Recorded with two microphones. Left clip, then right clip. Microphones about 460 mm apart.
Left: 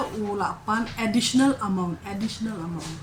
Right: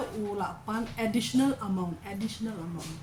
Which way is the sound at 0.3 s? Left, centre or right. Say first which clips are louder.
Left 10 dB; right.